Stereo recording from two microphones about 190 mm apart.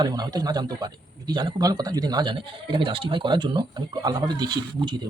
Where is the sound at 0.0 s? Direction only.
20° right (ahead or behind).